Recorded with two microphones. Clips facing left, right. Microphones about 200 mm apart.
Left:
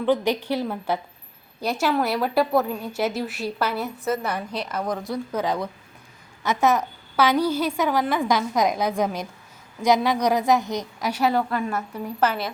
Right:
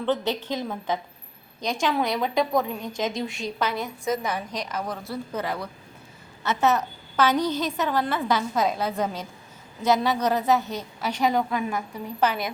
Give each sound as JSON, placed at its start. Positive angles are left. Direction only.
{"t": 0.0, "sound": "a woman's voice", "side_deg": 10}
{"t": 4.2, "sound": "a woman's voice", "side_deg": -10}
{"t": 4.5, "sound": "a woman's voice", "side_deg": 10}